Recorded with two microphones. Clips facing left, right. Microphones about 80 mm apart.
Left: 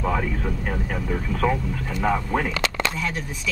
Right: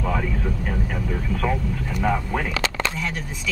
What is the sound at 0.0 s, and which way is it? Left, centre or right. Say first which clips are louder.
Vehicle: left 1 dB; centre.